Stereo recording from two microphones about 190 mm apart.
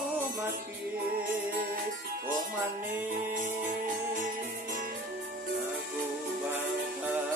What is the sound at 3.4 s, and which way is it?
Music, 45° right (ahead or behind).